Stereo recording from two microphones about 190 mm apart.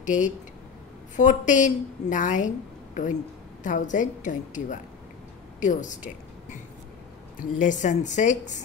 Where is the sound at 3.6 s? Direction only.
40° left (ahead or behind).